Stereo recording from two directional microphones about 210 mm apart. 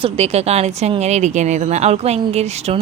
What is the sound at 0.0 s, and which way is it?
A woman's voice, 30° right (ahead or behind).